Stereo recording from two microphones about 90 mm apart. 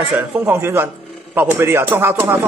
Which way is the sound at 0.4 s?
25° right (ahead or behind).